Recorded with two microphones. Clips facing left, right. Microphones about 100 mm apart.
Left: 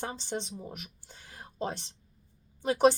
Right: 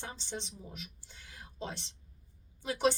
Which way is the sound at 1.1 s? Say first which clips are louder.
Left 7 dB; 45° left (ahead or behind).